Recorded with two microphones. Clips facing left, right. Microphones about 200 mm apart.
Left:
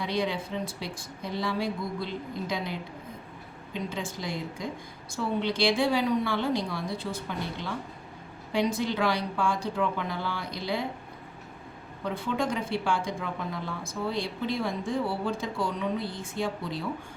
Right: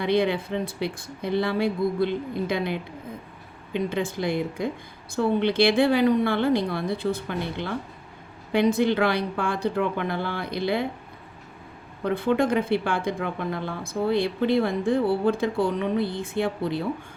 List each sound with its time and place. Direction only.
0.0 s speech: 60° right (ahead or behind)
12.0 s speech: 60° right (ahead or behind)